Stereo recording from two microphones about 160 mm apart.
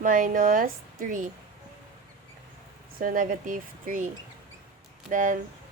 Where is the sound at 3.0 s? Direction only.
60° right (ahead or behind).